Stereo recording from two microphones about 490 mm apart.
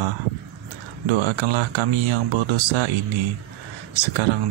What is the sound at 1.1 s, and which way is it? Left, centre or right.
Speech, right.